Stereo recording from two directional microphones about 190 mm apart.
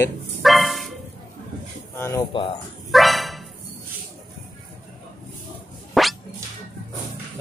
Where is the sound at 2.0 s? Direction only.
15° left (ahead or behind).